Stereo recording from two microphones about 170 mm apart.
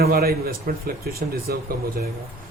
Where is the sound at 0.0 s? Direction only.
65° right (ahead or behind).